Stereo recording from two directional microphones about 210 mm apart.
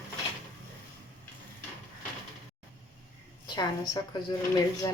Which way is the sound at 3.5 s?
20° left (ahead or behind).